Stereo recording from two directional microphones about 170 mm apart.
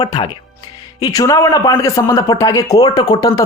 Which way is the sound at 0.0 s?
30° left (ahead or behind).